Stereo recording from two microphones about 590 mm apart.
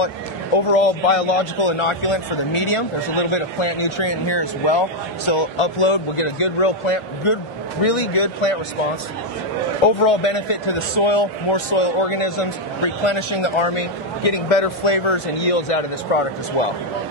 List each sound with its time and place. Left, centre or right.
0.7 s a man's voice: left
9.8 s a man's voice: left